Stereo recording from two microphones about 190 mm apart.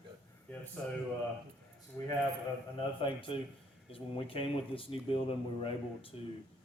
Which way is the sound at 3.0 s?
25° left (ahead or behind).